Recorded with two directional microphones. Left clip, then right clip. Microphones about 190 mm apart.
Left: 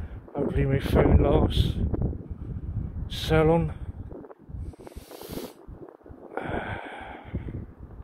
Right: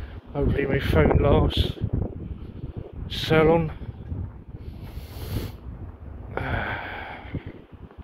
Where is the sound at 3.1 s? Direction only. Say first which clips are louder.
Right 3 dB; 20° left (ahead or behind).